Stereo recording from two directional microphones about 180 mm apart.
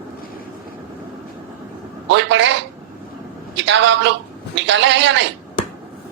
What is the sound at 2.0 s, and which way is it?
Speech, 85° right.